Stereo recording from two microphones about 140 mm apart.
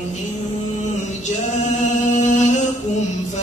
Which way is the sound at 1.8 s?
60° left (ahead or behind).